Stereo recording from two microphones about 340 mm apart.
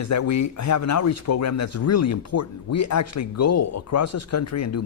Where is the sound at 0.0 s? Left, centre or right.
Left.